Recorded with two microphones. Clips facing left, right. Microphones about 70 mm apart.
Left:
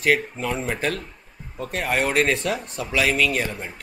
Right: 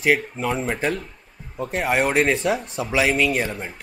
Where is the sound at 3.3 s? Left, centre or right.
Centre.